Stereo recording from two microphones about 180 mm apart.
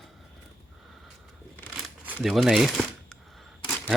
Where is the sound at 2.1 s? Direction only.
5° right (ahead or behind).